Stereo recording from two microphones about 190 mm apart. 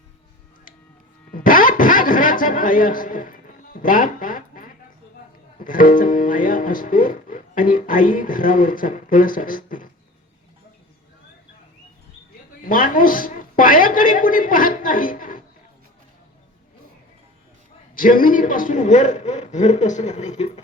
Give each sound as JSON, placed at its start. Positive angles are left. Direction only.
{"t": 1.3, "sound": "a sound", "side_deg": 45}
{"t": 5.5, "sound": "speech", "side_deg": 45}
{"t": 12.6, "sound": "speech", "side_deg": 45}
{"t": 17.9, "sound": "a man's voice", "side_deg": 45}